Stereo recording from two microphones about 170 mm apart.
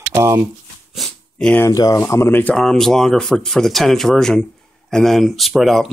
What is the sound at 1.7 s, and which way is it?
Speech, 20° left (ahead or behind).